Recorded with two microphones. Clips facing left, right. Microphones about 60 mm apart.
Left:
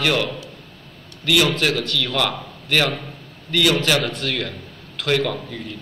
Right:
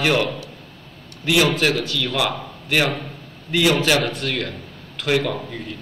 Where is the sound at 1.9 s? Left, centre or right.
Centre.